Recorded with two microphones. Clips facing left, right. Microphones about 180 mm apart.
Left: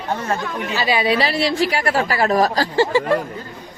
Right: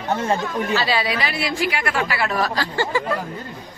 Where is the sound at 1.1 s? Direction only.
35° left (ahead or behind).